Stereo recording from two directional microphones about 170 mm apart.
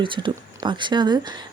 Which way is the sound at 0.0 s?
30° right (ahead or behind).